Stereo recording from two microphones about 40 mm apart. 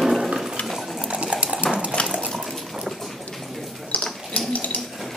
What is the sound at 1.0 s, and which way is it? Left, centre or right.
Cutlery, right.